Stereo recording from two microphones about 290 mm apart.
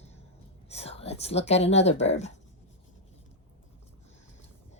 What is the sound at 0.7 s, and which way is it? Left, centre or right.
Speech, left.